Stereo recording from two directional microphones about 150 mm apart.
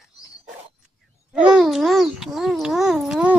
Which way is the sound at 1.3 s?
5° right (ahead or behind).